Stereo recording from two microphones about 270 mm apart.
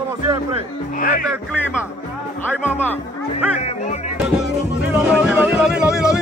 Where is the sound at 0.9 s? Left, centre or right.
Left.